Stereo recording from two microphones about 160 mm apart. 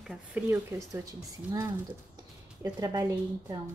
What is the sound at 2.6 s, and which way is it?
Speech, 20° right (ahead or behind).